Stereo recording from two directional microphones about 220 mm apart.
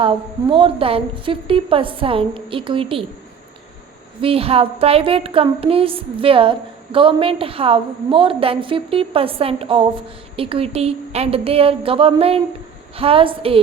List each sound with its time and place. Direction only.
0.0 s a woman's voice: 25° right (ahead or behind)
4.2 s a woman's voice: 25° right (ahead or behind)